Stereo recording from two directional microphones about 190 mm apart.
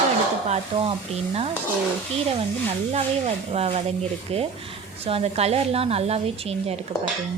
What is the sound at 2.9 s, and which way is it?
A woman's voice, 30° right (ahead or behind).